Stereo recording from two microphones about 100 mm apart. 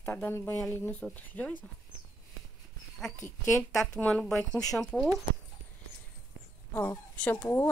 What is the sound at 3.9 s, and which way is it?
Speech, 10° left (ahead or behind).